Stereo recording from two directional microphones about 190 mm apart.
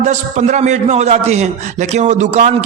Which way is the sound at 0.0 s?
35° right (ahead or behind).